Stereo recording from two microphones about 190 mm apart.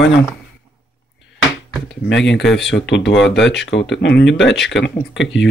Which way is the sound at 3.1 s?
Centre (ahead or behind).